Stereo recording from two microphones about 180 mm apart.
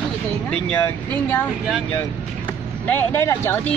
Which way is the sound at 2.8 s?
10° left (ahead or behind).